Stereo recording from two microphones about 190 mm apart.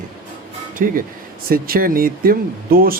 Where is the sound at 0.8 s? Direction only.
45° right (ahead or behind).